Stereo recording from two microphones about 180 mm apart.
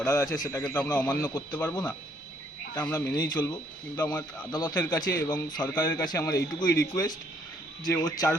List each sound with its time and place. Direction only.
0.0 s a man's voice: 15° left (ahead or behind)